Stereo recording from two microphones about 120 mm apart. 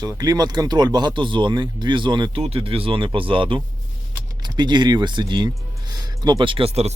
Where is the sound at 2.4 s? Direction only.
55° right (ahead or behind).